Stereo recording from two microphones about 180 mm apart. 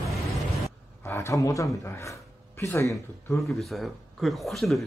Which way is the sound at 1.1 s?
15° left (ahead or behind).